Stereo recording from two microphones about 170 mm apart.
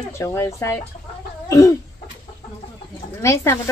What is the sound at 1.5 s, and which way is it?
Cough, 20° left (ahead or behind).